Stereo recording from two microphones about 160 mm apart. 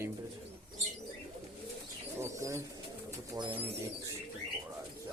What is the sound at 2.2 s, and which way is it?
Speech, 20° right (ahead or behind).